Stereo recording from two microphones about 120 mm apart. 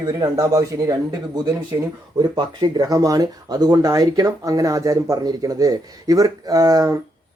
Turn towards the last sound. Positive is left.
turn(degrees=-30)  # may be behind; listen again after turning